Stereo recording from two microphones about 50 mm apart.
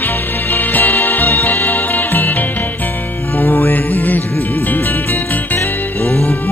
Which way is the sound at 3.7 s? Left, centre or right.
Left.